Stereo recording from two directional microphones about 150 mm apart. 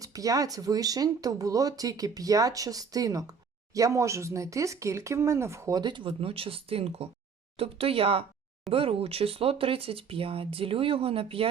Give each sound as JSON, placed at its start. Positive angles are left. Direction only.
{"t": 0.0, "sound": "speech", "side_deg": -25}